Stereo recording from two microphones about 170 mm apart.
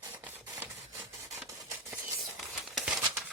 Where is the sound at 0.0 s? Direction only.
15° right (ahead or behind).